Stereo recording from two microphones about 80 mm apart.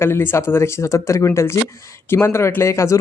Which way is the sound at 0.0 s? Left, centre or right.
Left.